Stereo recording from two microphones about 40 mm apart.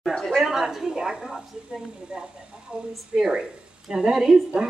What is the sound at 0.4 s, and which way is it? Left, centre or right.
A woman's voice, centre.